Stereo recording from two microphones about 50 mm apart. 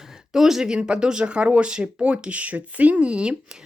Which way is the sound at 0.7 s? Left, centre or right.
Centre.